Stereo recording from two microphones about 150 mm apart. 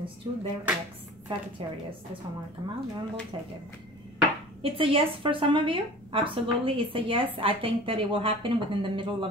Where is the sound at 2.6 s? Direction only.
30° right (ahead or behind).